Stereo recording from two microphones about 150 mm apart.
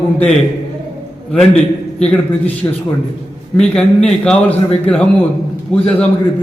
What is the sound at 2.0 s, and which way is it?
Speech, 5° left (ahead or behind).